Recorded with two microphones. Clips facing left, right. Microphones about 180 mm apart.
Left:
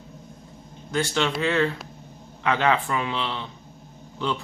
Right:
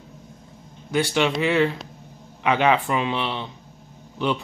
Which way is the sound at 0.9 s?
15° right (ahead or behind).